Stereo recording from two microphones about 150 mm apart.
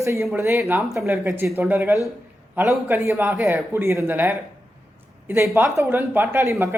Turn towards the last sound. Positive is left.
turn(degrees=-20)  # may be behind; listen again after turning